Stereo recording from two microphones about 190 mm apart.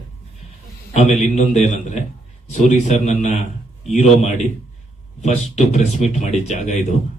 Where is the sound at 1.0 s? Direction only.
35° left (ahead or behind).